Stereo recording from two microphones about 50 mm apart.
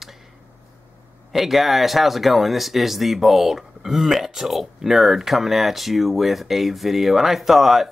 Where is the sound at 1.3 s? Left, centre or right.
Centre.